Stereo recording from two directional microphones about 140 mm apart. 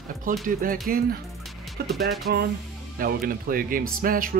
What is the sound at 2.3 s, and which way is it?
Speech, 90° right.